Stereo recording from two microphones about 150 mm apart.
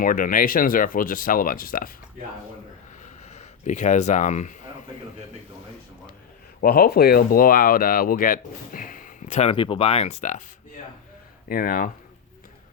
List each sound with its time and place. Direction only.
0.0 s speech: 65° left (ahead or behind)
3.0 s a sound: 50° left (ahead or behind)
6.6 s speech: 90° left; by 9.5 s 55° left (ahead or behind)
9.5 s speech: 35° left (ahead or behind); by 10.4 s 50° left (ahead or behind)
11.4 s speech: 70° left (ahead or behind)